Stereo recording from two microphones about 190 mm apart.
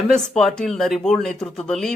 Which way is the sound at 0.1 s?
5° left (ahead or behind).